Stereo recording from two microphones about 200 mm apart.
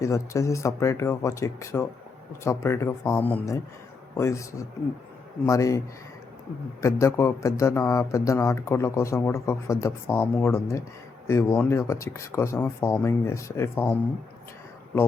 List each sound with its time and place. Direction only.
0.0 s speech: 15° left (ahead or behind)
6.8 s speech: 15° left (ahead or behind)